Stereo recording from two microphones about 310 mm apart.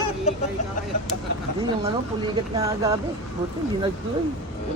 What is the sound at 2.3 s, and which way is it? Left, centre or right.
Speech, centre.